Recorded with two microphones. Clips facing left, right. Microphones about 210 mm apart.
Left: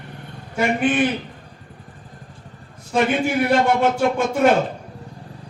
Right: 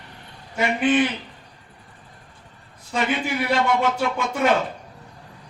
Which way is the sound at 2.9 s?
50° left (ahead or behind).